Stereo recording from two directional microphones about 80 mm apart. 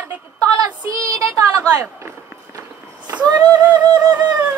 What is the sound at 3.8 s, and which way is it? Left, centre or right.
Music, right.